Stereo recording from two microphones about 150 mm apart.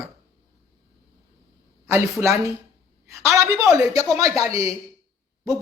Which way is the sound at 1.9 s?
20° right (ahead or behind).